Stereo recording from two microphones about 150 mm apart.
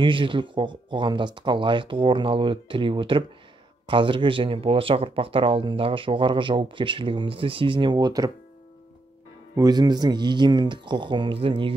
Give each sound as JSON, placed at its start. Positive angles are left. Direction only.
{"t": 0.0, "sound": "speech", "side_deg": -35}
{"t": 9.6, "sound": "speech", "side_deg": -25}